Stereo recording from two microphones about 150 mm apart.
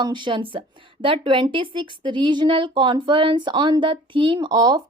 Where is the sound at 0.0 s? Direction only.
30° right (ahead or behind).